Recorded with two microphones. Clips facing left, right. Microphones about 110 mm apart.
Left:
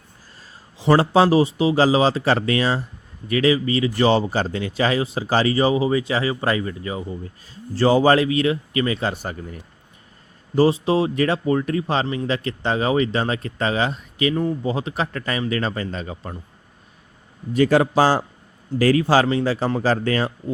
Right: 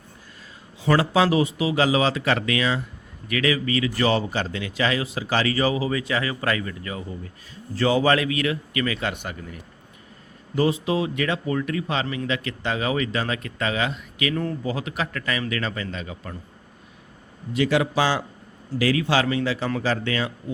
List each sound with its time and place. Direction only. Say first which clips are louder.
0.8 s speech: left 4 dB; 30° left (ahead or behind)
17.5 s speech: left 5 dB; 40° left (ahead or behind)